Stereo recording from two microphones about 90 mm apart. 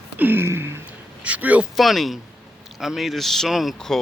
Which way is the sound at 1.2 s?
15° right (ahead or behind).